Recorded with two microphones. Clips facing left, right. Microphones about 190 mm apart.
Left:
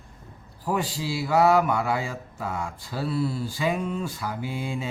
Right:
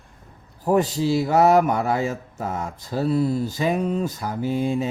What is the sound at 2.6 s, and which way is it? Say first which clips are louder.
Mantra: right 5 dB; 40° right (ahead or behind).